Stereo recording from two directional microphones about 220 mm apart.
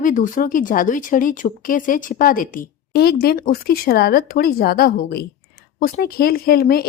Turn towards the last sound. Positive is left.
turn(degrees=40)  # may be behind; listen again after turning